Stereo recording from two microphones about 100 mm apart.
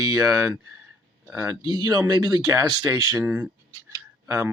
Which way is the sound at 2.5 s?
30° right (ahead or behind).